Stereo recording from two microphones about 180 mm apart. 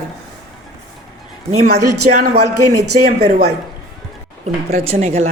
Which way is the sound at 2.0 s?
50° right (ahead or behind).